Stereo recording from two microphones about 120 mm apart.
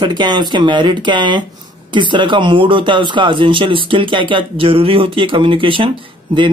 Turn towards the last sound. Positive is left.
turn(degrees=-45)  # may be behind; listen again after turning